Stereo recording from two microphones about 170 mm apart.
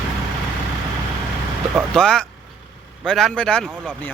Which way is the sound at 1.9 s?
5° left (ahead or behind).